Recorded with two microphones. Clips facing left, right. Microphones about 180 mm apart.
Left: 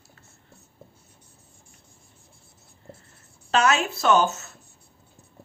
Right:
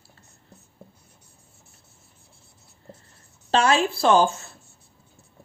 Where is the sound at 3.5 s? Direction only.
30° right (ahead or behind).